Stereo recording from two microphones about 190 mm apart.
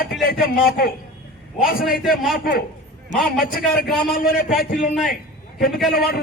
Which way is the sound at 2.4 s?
50° left (ahead or behind).